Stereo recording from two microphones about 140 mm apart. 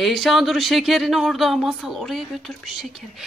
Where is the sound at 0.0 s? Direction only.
Centre (ahead or behind).